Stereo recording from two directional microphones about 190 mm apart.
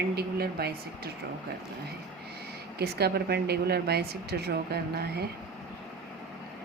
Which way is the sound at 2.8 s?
55° right (ahead or behind).